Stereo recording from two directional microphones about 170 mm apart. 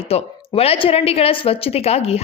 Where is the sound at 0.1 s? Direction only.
35° left (ahead or behind).